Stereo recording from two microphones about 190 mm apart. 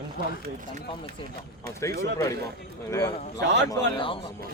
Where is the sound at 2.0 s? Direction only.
15° left (ahead or behind).